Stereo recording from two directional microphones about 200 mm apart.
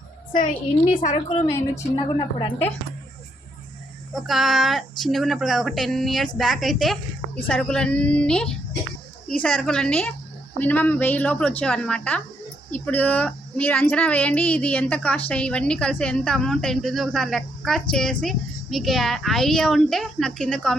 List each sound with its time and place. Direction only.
1.0 s a woman's voice: 30° left (ahead or behind)
1.5 s a woman's voice: 15° left (ahead or behind)
4.1 s a child's voice: centre (ahead or behind)